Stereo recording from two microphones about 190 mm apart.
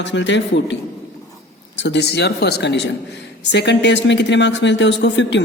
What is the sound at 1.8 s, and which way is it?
Speech, 65° left (ahead or behind).